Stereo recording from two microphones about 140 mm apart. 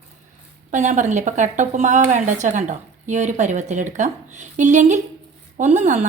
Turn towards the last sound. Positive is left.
turn(degrees=-60)  # may be behind; listen again after turning